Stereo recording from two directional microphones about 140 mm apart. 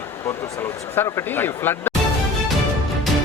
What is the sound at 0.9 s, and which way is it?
Speech, 15° left (ahead or behind).